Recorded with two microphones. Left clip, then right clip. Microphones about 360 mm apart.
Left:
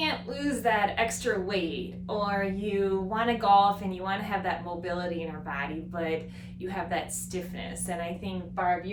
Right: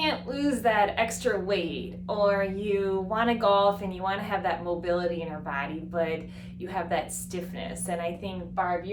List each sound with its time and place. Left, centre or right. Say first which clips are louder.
0.0 s a woman's voice: right 2 dB; centre